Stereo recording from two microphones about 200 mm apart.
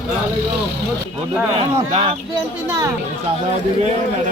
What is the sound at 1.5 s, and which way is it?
Speech, 30° right (ahead or behind).